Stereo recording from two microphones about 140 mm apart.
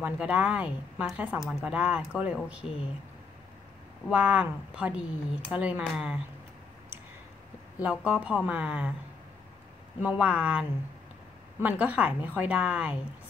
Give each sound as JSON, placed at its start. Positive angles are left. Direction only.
{"t": 0.0, "sound": "a woman's voice", "side_deg": -10}
{"t": 2.6, "sound": "speech", "side_deg": 40}
{"t": 4.1, "sound": "a woman's voice", "side_deg": -10}
{"t": 7.8, "sound": "a woman's voice", "side_deg": -10}
{"t": 10.0, "sound": "a woman's voice", "side_deg": -10}